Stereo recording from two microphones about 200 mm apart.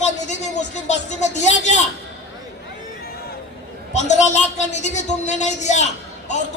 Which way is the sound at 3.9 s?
35° left (ahead or behind).